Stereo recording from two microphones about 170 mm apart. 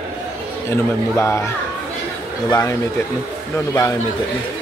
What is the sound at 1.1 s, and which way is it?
Speech, 15° left (ahead or behind).